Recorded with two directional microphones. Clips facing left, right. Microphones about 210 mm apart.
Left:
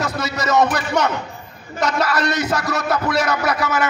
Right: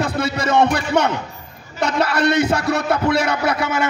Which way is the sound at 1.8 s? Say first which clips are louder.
Right 2 dB; 30° right (ahead or behind).